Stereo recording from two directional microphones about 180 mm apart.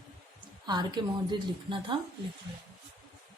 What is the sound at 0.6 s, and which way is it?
A woman's voice, 25° right (ahead or behind).